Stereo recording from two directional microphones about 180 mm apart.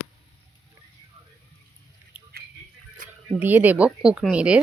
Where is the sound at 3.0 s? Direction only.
50° right (ahead or behind).